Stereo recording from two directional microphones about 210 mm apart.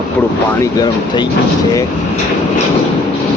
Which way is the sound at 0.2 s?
15° left (ahead or behind).